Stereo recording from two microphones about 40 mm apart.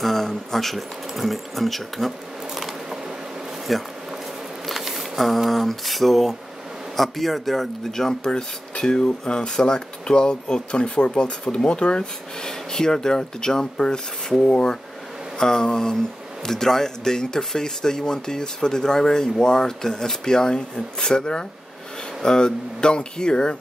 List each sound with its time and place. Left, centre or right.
0.0 s speech: centre
2.5 s a sound: centre
7.0 s speech: centre; by 23.6 s left